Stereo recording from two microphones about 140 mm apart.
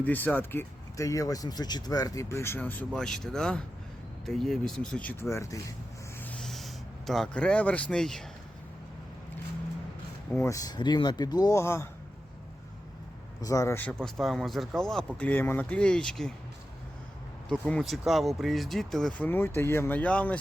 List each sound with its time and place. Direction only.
0.0 s speech: 10° left (ahead or behind)
5.2 s speech: 20° left (ahead or behind)
6.1 s a sound: 10° left (ahead or behind)
10.3 s speech: 20° left (ahead or behind)
13.4 s speech: 25° left (ahead or behind)
14.0 s speech: 5° left (ahead or behind)
17.7 s speech: 5° left (ahead or behind)